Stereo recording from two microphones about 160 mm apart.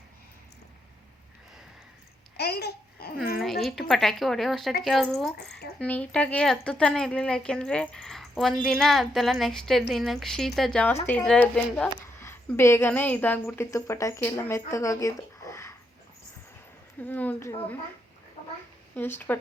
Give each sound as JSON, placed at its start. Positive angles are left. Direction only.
{"t": 2.3, "sound": "babbling", "side_deg": 85}
{"t": 3.3, "sound": "speech", "side_deg": 0}
{"t": 12.0, "sound": "a woman's voice", "side_deg": 15}
{"t": 17.0, "sound": "speech", "side_deg": 10}
{"t": 18.9, "sound": "speech", "side_deg": 10}